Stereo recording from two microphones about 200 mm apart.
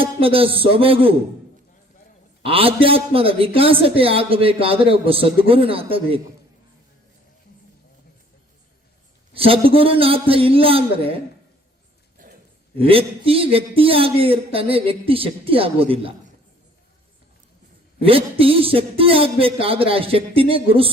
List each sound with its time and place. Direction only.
0.0 s speech: 30° right (ahead or behind)
2.4 s a man's voice: 30° right (ahead or behind)
9.3 s a man's voice: 30° right (ahead or behind)
12.2 s a sound: 40° right (ahead or behind)
12.7 s a man's voice: 30° right (ahead or behind)
18.0 s a man's voice: 30° right (ahead or behind)